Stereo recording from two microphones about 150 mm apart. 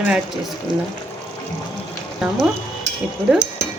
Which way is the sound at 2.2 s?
5° right (ahead or behind).